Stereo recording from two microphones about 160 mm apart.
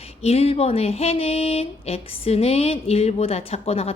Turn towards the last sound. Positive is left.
turn(degrees=40)  # may be behind; listen again after turning